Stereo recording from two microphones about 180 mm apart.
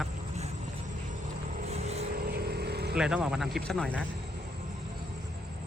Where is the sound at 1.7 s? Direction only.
35° right (ahead or behind).